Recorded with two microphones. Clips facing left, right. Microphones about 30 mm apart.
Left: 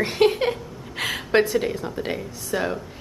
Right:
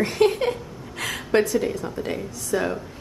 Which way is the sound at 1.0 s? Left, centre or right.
Left.